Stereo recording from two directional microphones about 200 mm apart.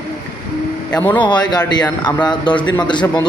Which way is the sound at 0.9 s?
10° left (ahead or behind).